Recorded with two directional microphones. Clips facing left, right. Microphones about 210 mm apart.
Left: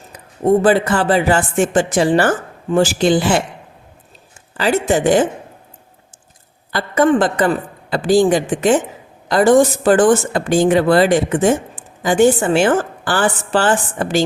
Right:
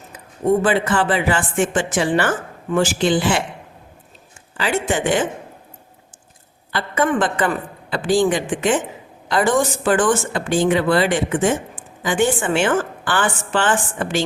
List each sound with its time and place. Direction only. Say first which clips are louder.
0.6 s speech: left 4 dB; 40° left (ahead or behind)
4.5 s speech: left 5 dB; 40° left (ahead or behind)
6.7 s a woman's voice: left 6 dB; 40° left (ahead or behind)